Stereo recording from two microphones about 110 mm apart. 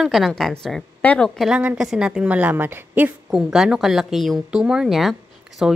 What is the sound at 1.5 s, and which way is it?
A woman's voice, 15° right (ahead or behind).